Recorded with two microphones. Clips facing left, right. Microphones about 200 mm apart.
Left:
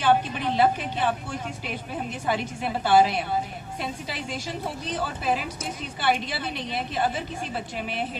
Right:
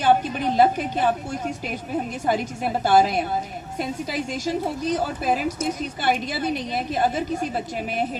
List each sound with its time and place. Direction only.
0.0 s a woman's voice: 40° right (ahead or behind)